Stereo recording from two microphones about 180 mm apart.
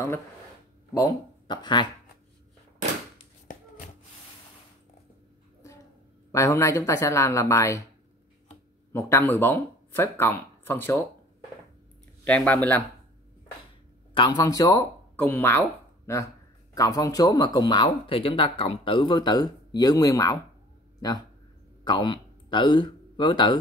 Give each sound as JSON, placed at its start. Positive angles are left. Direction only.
{"t": 0.9, "sound": "speech", "side_deg": 20}
{"t": 6.3, "sound": "a woman's voice", "side_deg": 15}
{"t": 8.9, "sound": "speech", "side_deg": 15}
{"t": 12.3, "sound": "a woman's voice", "side_deg": 5}
{"t": 14.1, "sound": "speech", "side_deg": 25}
{"t": 21.8, "sound": "speech", "side_deg": 25}